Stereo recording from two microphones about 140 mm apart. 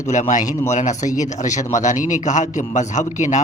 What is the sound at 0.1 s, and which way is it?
A man's voice, 60° left (ahead or behind).